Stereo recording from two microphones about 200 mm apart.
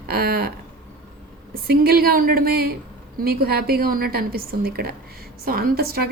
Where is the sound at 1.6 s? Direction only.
50° right (ahead or behind).